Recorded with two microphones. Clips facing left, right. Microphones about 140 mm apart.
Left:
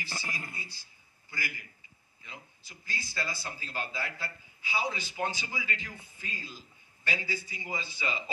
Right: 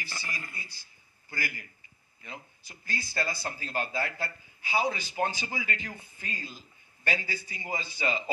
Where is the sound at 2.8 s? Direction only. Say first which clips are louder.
Right 4 dB; 50° right (ahead or behind).